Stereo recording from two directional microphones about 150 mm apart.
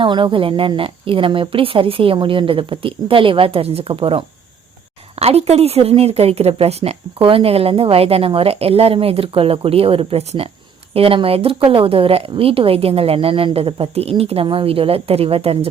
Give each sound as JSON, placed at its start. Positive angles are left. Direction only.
{"t": 0.0, "sound": "a woman's voice", "side_deg": -35}